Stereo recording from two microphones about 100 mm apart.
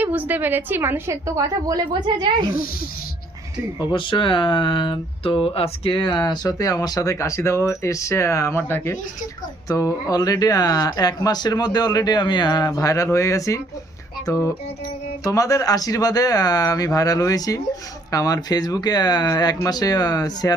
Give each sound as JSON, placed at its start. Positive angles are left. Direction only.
{"t": 0.0, "sound": "a woman's voice", "side_deg": -15}
{"t": 3.8, "sound": "speech", "side_deg": 55}